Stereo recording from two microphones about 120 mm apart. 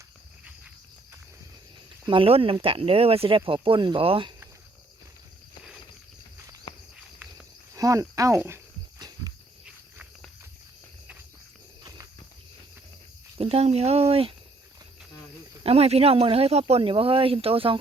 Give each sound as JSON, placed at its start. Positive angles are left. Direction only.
{"t": 2.0, "sound": "speech", "side_deg": -50}
{"t": 7.7, "sound": "speech", "side_deg": -30}
{"t": 9.0, "sound": "a sound", "side_deg": -35}
{"t": 11.8, "sound": "a sound", "side_deg": -30}
{"t": 13.4, "sound": "speech", "side_deg": -55}
{"t": 15.6, "sound": "speech", "side_deg": -60}